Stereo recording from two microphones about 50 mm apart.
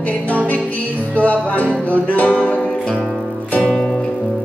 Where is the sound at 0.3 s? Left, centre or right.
Left.